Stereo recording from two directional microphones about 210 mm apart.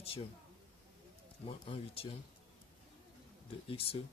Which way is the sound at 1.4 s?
25° left (ahead or behind).